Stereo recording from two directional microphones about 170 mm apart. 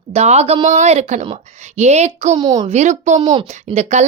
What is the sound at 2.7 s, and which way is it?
A woman's voice, 45° right (ahead or behind).